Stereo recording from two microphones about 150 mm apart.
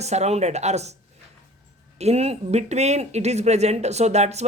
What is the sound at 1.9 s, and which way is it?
Speech, 45° right (ahead or behind).